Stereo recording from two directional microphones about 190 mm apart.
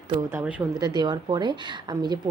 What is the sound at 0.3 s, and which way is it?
Speech, 10° right (ahead or behind).